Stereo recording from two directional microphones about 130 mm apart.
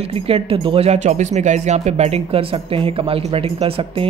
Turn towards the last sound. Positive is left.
turn(degrees=-45)  # may be behind; listen again after turning